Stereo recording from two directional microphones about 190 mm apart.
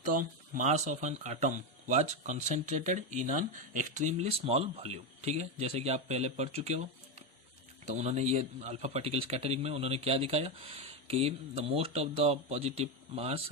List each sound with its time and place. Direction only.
0.1 s speech: 45° right (ahead or behind)